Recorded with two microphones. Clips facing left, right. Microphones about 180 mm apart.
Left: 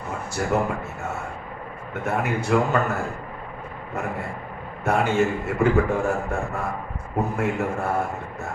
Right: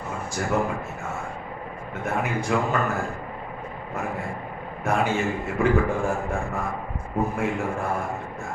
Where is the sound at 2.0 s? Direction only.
65° left (ahead or behind).